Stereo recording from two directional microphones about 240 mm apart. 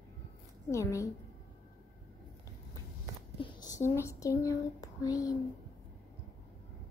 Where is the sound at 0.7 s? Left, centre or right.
Centre.